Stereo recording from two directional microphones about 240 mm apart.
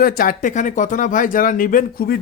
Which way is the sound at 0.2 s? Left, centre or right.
Left.